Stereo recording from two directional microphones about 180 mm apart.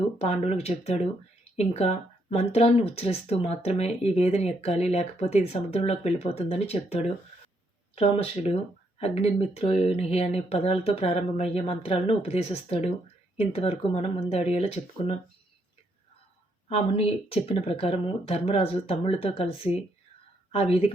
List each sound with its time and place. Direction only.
0.2 s speech: 35° left (ahead or behind)
16.6 s speech: 30° left (ahead or behind)